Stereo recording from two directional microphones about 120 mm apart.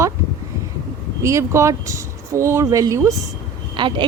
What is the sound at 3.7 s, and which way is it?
Speech, 45° right (ahead or behind).